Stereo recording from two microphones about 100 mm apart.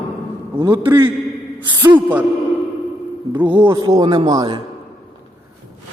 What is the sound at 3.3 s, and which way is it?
Speech, 15° right (ahead or behind).